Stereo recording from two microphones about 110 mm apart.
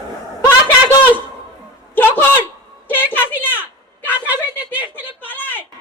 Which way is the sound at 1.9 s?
15° left (ahead or behind).